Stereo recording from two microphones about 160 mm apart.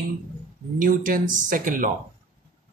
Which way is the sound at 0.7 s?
60° right (ahead or behind).